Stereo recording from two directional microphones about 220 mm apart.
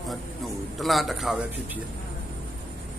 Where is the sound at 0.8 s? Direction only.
Centre (ahead or behind).